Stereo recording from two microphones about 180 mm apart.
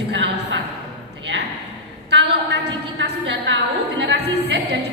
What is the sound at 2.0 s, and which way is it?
A woman's voice, 70° right (ahead or behind).